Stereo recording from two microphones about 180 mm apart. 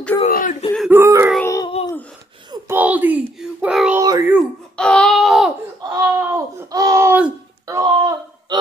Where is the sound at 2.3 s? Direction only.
25° right (ahead or behind).